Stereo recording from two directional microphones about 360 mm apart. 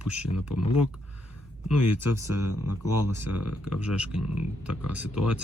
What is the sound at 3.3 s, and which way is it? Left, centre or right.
Speech, left.